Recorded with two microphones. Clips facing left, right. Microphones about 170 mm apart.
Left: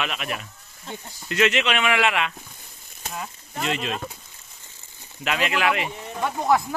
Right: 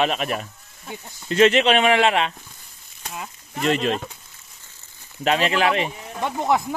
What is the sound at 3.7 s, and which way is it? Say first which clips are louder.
Speech: right 7 dB; 45° right (ahead or behind).